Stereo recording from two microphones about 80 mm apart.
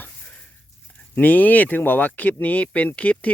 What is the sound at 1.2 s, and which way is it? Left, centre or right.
Speech, left.